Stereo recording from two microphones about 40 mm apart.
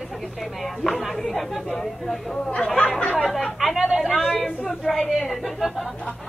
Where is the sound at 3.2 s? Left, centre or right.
Centre.